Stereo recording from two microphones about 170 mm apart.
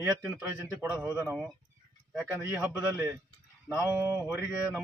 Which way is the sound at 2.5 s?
15° right (ahead or behind).